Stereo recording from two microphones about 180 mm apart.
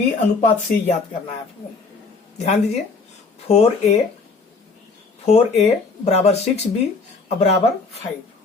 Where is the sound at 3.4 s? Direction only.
35° left (ahead or behind).